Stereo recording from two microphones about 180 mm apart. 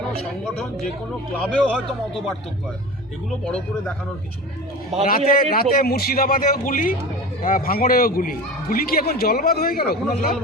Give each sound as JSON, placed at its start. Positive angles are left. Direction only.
{"t": 0.4, "sound": "a man's voice", "side_deg": 5}
{"t": 5.0, "sound": "a man's voice", "side_deg": 50}